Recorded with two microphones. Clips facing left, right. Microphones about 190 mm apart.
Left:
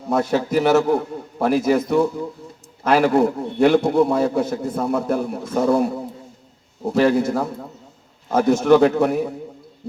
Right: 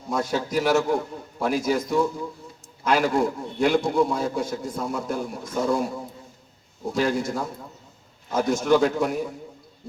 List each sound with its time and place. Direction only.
0.1 s a man's voice: 65° left (ahead or behind)